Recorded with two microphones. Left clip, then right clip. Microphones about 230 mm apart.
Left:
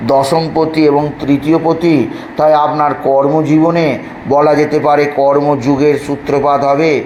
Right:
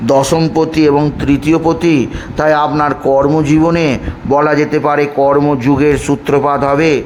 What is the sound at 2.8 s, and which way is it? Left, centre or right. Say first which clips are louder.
A man's voice: even; right.